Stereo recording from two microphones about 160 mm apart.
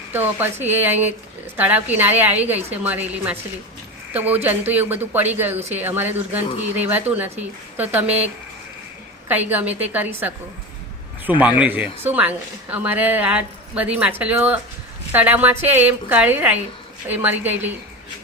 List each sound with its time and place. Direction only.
0.1 s speech: 10° right (ahead or behind)
9.3 s speech: 10° right (ahead or behind)